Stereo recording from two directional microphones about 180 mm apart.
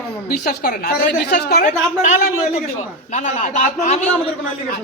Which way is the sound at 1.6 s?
45° left (ahead or behind).